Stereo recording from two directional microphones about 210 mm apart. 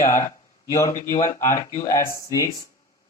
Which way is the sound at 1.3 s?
15° left (ahead or behind).